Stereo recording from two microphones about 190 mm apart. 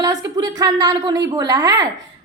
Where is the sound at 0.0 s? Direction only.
20° right (ahead or behind).